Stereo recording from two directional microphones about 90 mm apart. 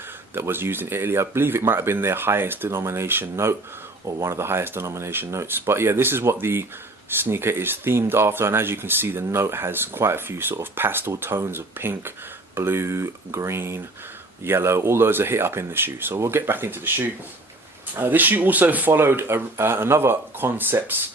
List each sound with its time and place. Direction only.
0.3 s speech: 25° right (ahead or behind)